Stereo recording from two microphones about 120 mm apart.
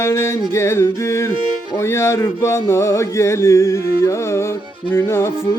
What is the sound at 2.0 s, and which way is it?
Music, 25° left (ahead or behind).